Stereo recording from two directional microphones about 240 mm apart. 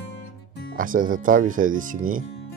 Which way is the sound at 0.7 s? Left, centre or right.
Right.